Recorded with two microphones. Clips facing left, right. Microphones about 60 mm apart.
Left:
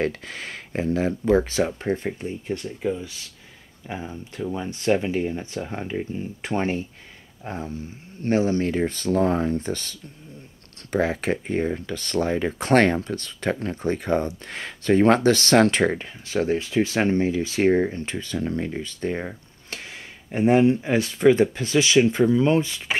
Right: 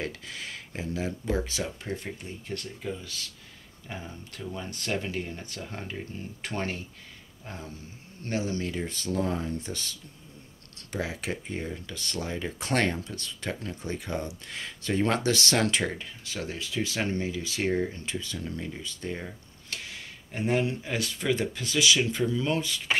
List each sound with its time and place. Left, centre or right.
0.0 s speech: left
2.1 s speech: left
20.2 s speech: left